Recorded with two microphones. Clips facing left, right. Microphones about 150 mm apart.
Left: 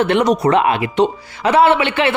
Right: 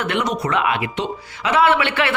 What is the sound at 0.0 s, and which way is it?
A man's voice, 35° left (ahead or behind).